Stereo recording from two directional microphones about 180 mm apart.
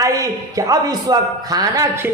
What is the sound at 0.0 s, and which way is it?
A woman's voice, 20° right (ahead or behind).